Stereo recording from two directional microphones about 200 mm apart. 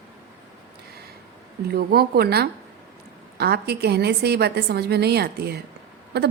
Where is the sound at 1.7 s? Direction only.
50° right (ahead or behind).